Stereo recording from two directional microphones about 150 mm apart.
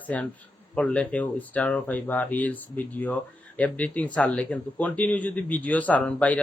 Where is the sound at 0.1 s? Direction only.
10° left (ahead or behind).